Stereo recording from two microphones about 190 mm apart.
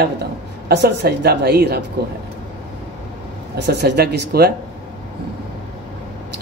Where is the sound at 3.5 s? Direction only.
60° right (ahead or behind).